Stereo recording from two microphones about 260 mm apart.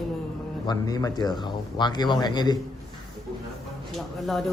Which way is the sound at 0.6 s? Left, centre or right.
Centre.